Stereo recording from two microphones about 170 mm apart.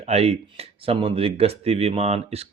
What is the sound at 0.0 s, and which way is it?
Speech, 40° right (ahead or behind).